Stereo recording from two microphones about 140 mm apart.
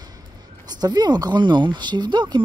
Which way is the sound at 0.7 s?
30° right (ahead or behind).